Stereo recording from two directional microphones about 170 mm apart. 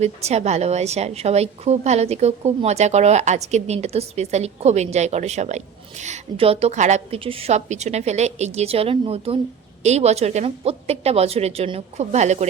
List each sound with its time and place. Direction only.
0.0 s a woman's voice: 40° right (ahead or behind)